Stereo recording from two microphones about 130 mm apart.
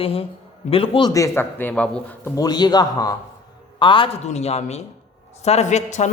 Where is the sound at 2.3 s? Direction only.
30° left (ahead or behind).